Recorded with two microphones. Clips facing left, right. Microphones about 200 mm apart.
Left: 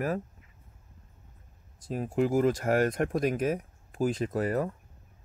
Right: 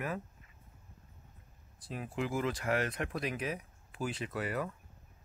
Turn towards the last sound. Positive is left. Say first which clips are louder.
# left 8 dB
turn(degrees=40)  # may be behind; listen again after turning